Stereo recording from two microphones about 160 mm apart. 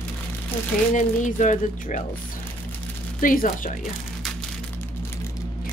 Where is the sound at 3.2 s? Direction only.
60° left (ahead or behind).